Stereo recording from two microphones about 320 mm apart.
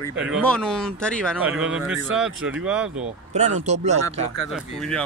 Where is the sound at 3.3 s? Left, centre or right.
Right.